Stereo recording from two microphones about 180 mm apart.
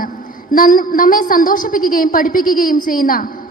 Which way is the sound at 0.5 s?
50° left (ahead or behind).